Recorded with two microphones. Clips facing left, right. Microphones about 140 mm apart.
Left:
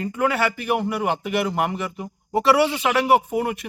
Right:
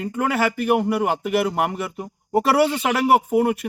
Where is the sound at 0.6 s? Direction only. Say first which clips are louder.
Right 4 dB; 40° right (ahead or behind).